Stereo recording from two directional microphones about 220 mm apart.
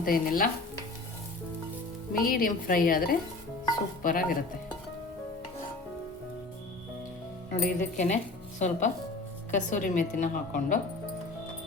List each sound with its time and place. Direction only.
0.0 s a woman's voice: 40° left (ahead or behind)
2.1 s a woman's voice: 40° left (ahead or behind)
7.5 s a woman's voice: 40° left (ahead or behind)